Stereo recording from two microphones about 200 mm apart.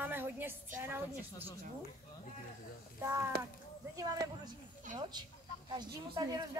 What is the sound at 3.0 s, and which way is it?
A child's voice, 15° right (ahead or behind).